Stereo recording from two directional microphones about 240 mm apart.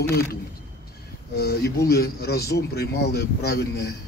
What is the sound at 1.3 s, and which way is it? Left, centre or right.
Speech, left.